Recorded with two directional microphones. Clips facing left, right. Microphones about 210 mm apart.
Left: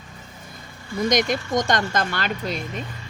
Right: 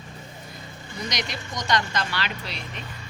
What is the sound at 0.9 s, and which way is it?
Speech, 50° left (ahead or behind).